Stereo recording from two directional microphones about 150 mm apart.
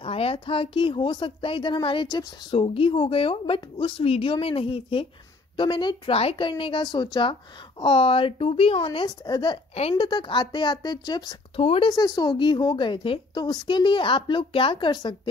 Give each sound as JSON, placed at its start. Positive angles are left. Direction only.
{"t": 0.0, "sound": "a woman's voice", "side_deg": 40}
{"t": 11.6, "sound": "a woman's voice", "side_deg": 40}
{"t": 11.9, "sound": "a woman's voice", "side_deg": 25}